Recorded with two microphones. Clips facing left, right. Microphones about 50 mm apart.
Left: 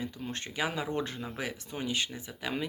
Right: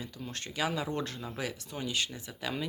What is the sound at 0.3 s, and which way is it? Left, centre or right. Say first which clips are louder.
A man's voice: right 1 dB; left.